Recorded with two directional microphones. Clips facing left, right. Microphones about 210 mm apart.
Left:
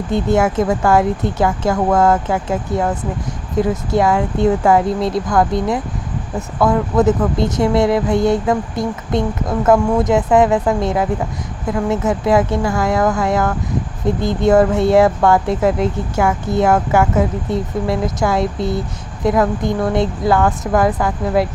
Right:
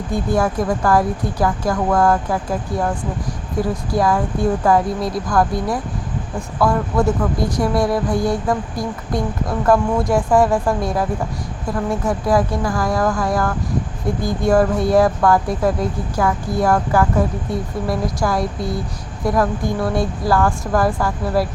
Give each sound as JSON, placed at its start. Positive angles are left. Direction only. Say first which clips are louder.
{"t": 0.1, "sound": "speech", "louder": "left 3 dB", "side_deg": 25}